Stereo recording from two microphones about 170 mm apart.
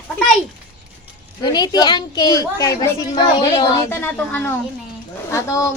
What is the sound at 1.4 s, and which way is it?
A woman's voice, 25° left (ahead or behind).